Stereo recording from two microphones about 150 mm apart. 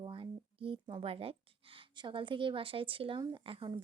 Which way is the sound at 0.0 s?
35° right (ahead or behind).